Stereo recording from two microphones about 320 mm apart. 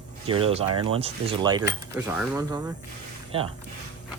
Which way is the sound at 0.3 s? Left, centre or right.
Centre.